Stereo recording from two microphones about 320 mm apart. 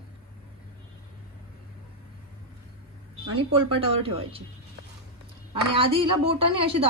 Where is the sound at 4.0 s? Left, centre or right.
Centre.